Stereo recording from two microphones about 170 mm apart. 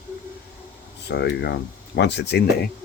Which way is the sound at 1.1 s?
85° left.